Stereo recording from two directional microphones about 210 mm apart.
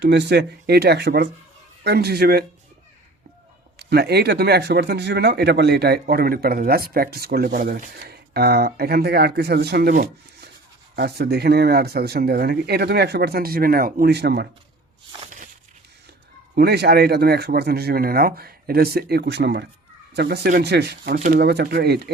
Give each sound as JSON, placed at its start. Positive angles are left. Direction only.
{"t": 0.0, "sound": "speech", "side_deg": -55}
{"t": 3.8, "sound": "speech", "side_deg": -50}
{"t": 16.6, "sound": "speech", "side_deg": -50}